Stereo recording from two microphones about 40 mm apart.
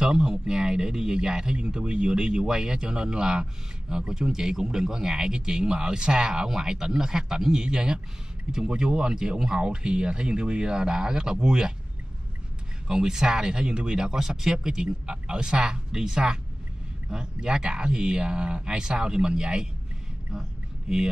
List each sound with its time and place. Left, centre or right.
0.0 s speech: right
12.8 s speech: centre